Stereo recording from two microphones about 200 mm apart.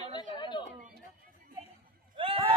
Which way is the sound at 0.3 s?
25° left (ahead or behind).